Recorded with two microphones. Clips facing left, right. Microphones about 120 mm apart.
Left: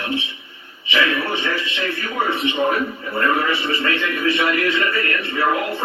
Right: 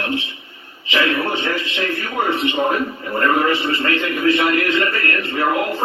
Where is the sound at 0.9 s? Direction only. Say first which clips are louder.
Right 2 dB; 40° right (ahead or behind).